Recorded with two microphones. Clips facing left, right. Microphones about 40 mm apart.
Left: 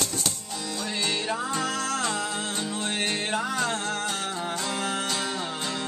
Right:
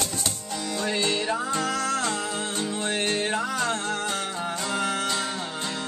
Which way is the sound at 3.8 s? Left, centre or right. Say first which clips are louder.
Right 1 dB; centre.